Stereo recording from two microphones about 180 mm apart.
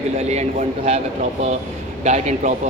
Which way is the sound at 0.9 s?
40° right (ahead or behind).